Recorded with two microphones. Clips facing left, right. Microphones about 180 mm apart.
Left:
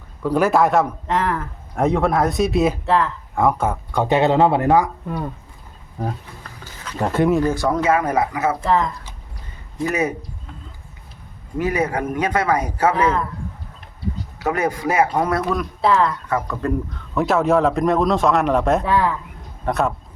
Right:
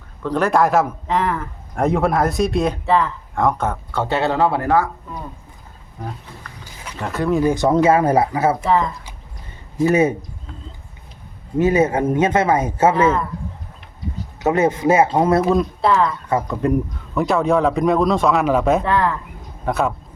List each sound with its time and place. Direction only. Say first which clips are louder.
0.2 s a man's voice: left 1 dB; 10° left (ahead or behind)
7.0 s speech: left 5 dB; 30° left (ahead or behind)
7.4 s speech: right 4 dB; 20° right (ahead or behind)
8.6 s a man's voice: right 1 dB; centre (ahead or behind)
9.8 s speech: right 6 dB; 25° right (ahead or behind)
11.5 s speech: right 5 dB; 25° right (ahead or behind)
14.3 s speech: right 5 dB; 25° right (ahead or behind)
15.8 s a man's voice: even; centre (ahead or behind)
16.3 s speech: right 3 dB; 20° right (ahead or behind)
17.2 s a man's voice: even; centre (ahead or behind)